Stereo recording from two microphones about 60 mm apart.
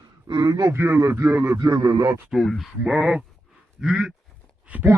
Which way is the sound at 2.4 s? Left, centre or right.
Centre.